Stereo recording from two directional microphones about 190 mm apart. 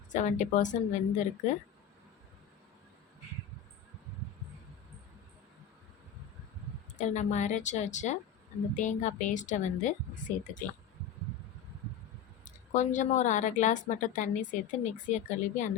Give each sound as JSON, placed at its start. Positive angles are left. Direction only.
{"t": 0.1, "sound": "speech", "side_deg": 40}
{"t": 7.0, "sound": "speech", "side_deg": 40}
{"t": 12.5, "sound": "speech", "side_deg": 40}